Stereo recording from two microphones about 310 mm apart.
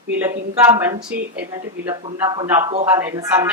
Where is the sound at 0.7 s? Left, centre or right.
Centre.